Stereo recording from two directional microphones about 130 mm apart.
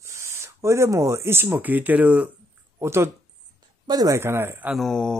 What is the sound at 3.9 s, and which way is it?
Speech, 30° right (ahead or behind).